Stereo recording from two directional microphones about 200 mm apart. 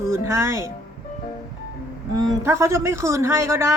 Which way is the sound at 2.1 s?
15° right (ahead or behind).